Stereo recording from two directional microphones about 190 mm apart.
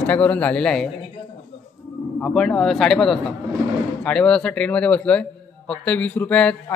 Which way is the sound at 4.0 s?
5° left (ahead or behind).